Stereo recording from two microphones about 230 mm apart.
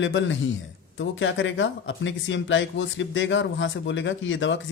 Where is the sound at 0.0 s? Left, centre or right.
Left.